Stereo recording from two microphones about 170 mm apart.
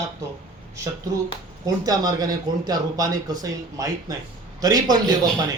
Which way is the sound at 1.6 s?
20° right (ahead or behind).